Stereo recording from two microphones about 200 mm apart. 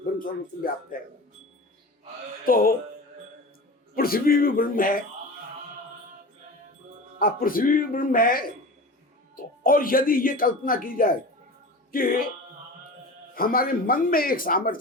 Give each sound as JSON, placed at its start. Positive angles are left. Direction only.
{"t": 0.0, "sound": "speech", "side_deg": 45}
{"t": 2.5, "sound": "speech", "side_deg": 45}
{"t": 3.9, "sound": "speech", "side_deg": 50}
{"t": 7.2, "sound": "speech", "side_deg": 45}
{"t": 13.3, "sound": "speech", "side_deg": 45}